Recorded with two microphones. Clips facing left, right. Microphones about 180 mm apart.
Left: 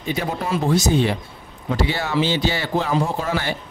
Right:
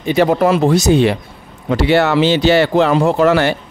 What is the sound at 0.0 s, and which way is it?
Speech, 75° right (ahead or behind).